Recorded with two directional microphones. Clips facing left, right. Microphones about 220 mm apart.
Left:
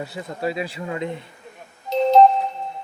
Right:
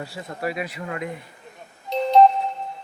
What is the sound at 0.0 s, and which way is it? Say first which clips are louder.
Speech: left 3 dB; 20° left (ahead or behind).